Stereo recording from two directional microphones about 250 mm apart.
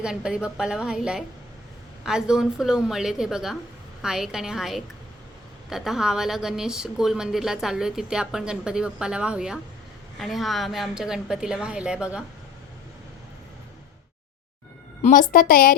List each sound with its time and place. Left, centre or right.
0.0 s a woman's voice: centre
15.0 s a woman's voice: left